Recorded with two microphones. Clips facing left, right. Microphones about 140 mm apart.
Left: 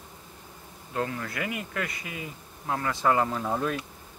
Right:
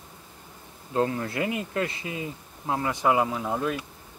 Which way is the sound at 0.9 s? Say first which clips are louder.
Right 5 dB; 25° right (ahead or behind).